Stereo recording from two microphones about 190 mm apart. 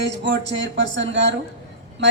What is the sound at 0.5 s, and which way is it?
Speech, 70° right (ahead or behind).